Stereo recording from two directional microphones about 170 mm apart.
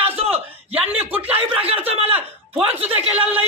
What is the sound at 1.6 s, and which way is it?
A man's voice, 35° right (ahead or behind).